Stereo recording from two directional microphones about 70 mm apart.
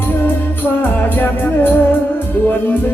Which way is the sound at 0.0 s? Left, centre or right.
Left.